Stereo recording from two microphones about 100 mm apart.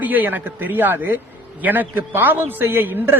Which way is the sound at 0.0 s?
20° right (ahead or behind).